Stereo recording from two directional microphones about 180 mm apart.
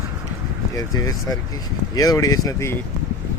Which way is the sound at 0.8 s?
20° left (ahead or behind).